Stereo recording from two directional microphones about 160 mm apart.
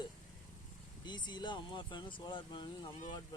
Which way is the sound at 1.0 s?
30° left (ahead or behind).